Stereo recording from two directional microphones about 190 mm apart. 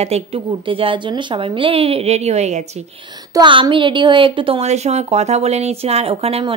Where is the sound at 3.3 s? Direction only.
25° right (ahead or behind).